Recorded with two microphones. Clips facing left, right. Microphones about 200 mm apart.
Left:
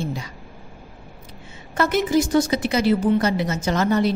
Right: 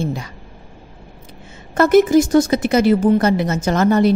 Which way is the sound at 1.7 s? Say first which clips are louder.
Right 8 dB; 50° right (ahead or behind).